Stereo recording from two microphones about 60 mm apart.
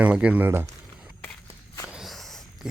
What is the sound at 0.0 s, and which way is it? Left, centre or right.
Speech, centre.